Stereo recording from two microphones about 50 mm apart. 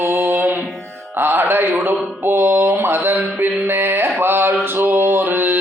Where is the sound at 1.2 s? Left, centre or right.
Right.